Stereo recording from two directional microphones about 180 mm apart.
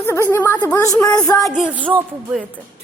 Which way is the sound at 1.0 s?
20° left (ahead or behind).